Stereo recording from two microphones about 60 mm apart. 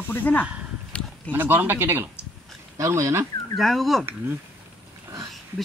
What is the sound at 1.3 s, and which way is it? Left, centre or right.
Speech, right.